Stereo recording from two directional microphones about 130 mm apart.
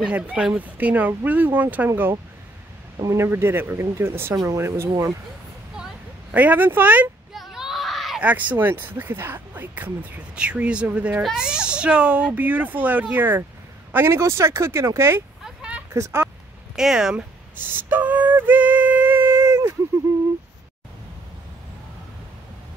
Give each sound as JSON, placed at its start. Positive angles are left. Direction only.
{"t": 0.0, "sound": "speech", "side_deg": -10}
{"t": 6.3, "sound": "speech", "side_deg": -15}
{"t": 7.3, "sound": "screaming", "side_deg": -5}
{"t": 8.3, "sound": "speech", "side_deg": -10}
{"t": 15.4, "sound": "a sound", "side_deg": -10}
{"t": 15.9, "sound": "speech", "side_deg": -20}
{"t": 16.7, "sound": "a sound", "side_deg": -5}